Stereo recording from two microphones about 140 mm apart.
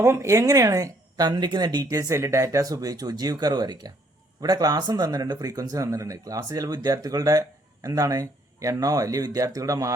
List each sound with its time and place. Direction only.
0.0 s speech: 20° right (ahead or behind)